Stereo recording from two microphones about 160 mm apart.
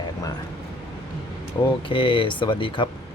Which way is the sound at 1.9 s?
30° left (ahead or behind).